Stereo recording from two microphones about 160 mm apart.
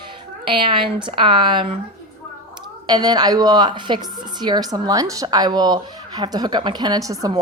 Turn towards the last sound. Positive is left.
turn(degrees=-20)  # may be behind; listen again after turning